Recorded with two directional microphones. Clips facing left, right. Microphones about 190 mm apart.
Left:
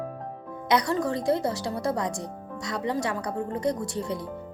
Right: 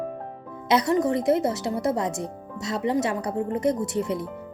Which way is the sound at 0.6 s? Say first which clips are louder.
Right 3 dB; 25° right (ahead or behind).